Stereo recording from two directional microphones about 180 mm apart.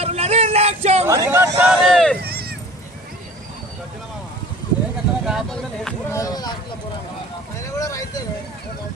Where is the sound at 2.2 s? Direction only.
60° right (ahead or behind).